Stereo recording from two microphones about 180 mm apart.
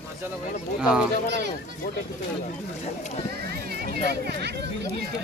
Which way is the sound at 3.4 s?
60° right (ahead or behind).